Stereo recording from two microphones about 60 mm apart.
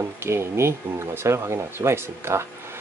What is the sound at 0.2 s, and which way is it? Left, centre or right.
Speech, right.